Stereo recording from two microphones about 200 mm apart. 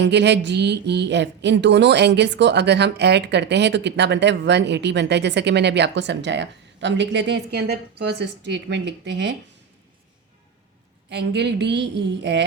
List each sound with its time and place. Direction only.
0.0 s a woman's voice: 60° right (ahead or behind)
11.1 s a woman's voice: 60° right (ahead or behind)